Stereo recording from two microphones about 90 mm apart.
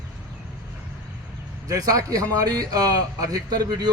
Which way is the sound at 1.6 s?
40° right (ahead or behind).